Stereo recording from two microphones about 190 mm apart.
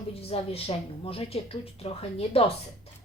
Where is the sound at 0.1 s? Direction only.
30° left (ahead or behind).